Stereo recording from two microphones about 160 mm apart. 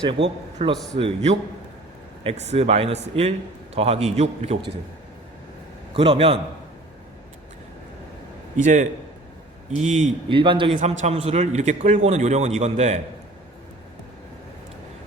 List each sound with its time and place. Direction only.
0.0 s a man's voice: 35° right (ahead or behind)
5.9 s a man's voice: 35° right (ahead or behind)
8.6 s a man's voice: 50° right (ahead or behind)
10.2 s a man's voice: 30° right (ahead or behind)
10.8 s a man's voice: 45° right (ahead or behind)